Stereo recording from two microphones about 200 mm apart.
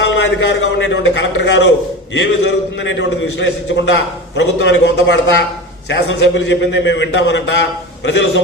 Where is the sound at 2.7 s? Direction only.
65° left (ahead or behind).